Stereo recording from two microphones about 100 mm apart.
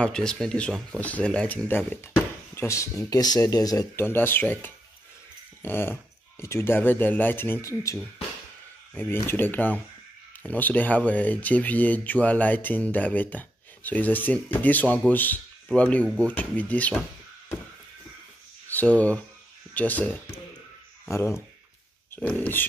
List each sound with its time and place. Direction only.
0.0 s speech: 10° left (ahead or behind); by 3.8 s 40° left (ahead or behind)
3.9 s speech: 20° left (ahead or behind)
8.9 s speech: 20° left (ahead or behind)
18.7 s speech: 15° left (ahead or behind)
21.1 s speech: 30° left (ahead or behind)
22.1 s speech: 15° left (ahead or behind)